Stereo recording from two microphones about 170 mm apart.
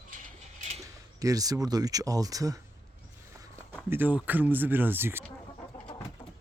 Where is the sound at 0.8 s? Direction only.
20° right (ahead or behind).